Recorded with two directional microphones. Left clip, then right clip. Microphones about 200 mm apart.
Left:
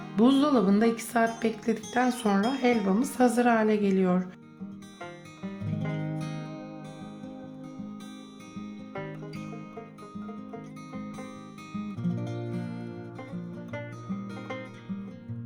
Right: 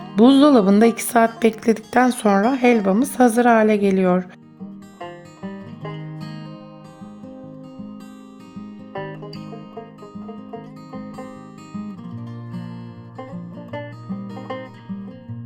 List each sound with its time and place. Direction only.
0.2 s speech: 40° right (ahead or behind)